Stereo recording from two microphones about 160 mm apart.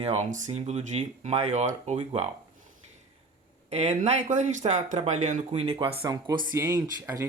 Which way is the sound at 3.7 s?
45° right (ahead or behind).